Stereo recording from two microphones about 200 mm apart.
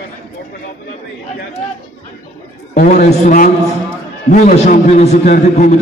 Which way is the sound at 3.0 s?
40° left (ahead or behind).